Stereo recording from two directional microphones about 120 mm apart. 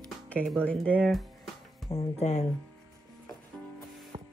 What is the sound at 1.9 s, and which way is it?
Speech, 55° left (ahead or behind).